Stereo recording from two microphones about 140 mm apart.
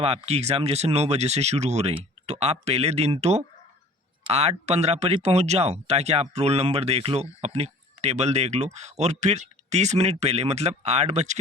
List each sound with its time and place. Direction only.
0.0 s speech: 45° right (ahead or behind)